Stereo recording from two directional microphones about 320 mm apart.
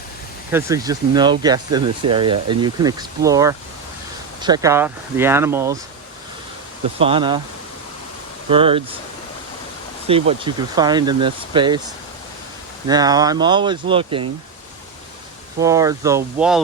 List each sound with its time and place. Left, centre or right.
0.5 s speech: centre
7.0 s speech: centre
8.4 s speech: centre
10.1 s speech: centre
12.9 s speech: centre
15.5 s speech: centre